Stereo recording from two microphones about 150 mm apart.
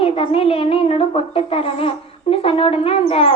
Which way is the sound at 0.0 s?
40° left (ahead or behind).